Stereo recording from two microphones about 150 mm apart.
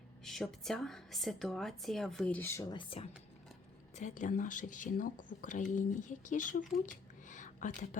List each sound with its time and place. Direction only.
0.3 s a woman's voice: centre (ahead or behind); by 2.7 s 20° left (ahead or behind)
2.7 s speech: 40° left (ahead or behind)
3.9 s speech: 55° left (ahead or behind)
7.3 s a sound: 55° left (ahead or behind)